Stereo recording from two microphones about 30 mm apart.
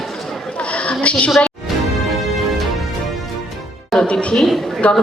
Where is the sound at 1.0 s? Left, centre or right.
Left.